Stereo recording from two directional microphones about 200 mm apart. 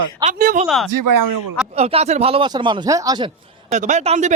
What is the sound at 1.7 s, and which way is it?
Speech, 30° right (ahead or behind).